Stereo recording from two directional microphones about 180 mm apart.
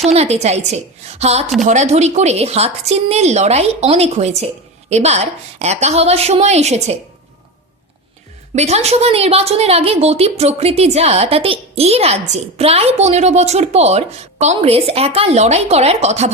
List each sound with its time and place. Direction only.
0.0 s a woman's voice: 35° right (ahead or behind)
8.5 s a woman's voice: 35° right (ahead or behind)